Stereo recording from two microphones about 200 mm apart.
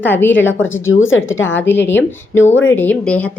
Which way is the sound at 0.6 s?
75° left (ahead or behind).